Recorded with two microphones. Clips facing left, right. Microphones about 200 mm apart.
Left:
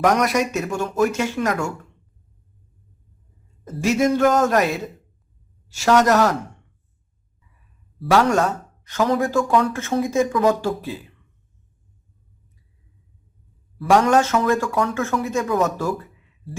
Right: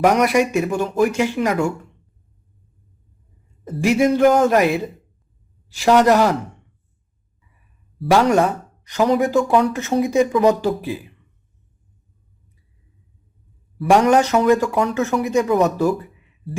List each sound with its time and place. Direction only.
0.0 s speech: 10° right (ahead or behind)
4.2 s speech: 10° right (ahead or behind)
5.8 s speech: 10° right (ahead or behind)
8.1 s speech: 15° right (ahead or behind)
13.9 s speech: 15° right (ahead or behind)